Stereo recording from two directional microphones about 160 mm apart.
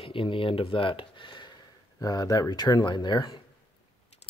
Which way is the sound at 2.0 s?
25° left (ahead or behind).